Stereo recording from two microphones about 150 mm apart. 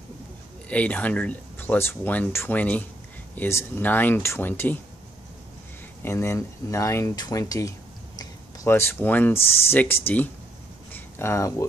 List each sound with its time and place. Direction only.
0.7 s speech: 10° left (ahead or behind)
6.0 s speech: 20° left (ahead or behind)
10.9 s a sound: 15° left (ahead or behind)